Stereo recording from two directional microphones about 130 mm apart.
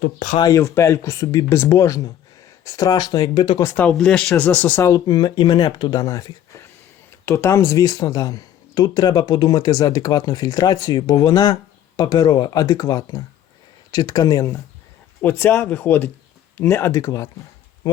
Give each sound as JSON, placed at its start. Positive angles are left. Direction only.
{"t": 0.3, "sound": "speech", "side_deg": 25}
{"t": 3.6, "sound": "speech", "side_deg": 10}